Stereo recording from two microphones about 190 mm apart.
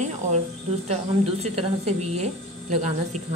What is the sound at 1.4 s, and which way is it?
Speech, 35° right (ahead or behind).